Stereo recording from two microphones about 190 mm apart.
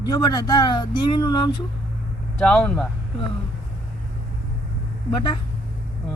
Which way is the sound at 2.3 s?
5° left (ahead or behind).